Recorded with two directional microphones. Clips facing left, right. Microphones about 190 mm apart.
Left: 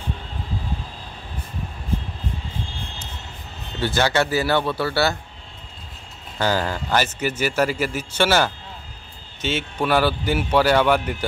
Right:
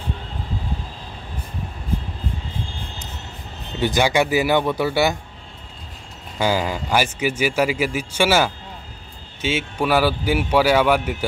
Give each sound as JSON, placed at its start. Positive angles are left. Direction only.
{"t": 3.8, "sound": "a man's voice", "side_deg": -15}
{"t": 6.3, "sound": "a man's voice", "side_deg": -10}